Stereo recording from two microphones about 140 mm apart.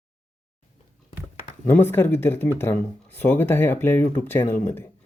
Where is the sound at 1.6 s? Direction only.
15° left (ahead or behind).